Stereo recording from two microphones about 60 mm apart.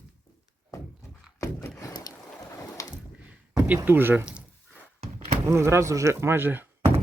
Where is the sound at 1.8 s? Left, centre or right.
Left.